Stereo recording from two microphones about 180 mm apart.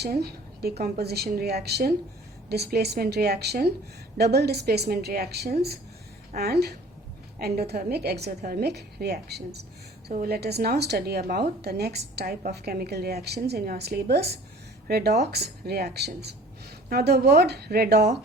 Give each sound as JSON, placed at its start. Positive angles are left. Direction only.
{"t": 0.0, "sound": "a woman's voice", "side_deg": -60}